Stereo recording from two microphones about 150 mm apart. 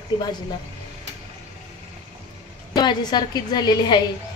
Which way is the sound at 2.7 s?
30° left (ahead or behind).